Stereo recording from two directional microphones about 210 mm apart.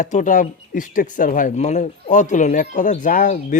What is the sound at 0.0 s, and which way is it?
A man's voice, 35° left (ahead or behind).